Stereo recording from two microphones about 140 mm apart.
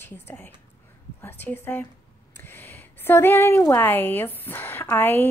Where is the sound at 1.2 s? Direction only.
15° left (ahead or behind).